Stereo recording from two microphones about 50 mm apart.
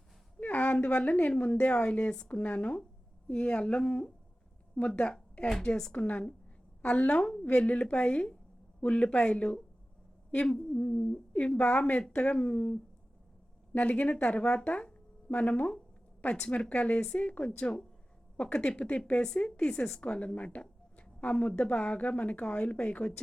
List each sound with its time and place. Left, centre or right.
0.3 s a woman's voice: left
7.2 s a woman's voice: centre